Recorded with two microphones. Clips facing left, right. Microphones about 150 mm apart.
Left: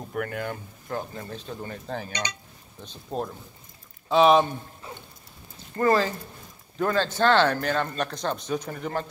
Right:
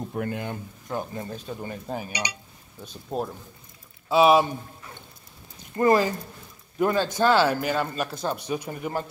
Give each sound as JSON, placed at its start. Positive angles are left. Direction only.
{"t": 0.1, "sound": "speech", "side_deg": -25}
{"t": 5.8, "sound": "speech", "side_deg": -15}